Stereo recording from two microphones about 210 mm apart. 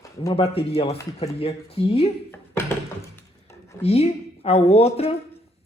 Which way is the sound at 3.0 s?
15° left (ahead or behind).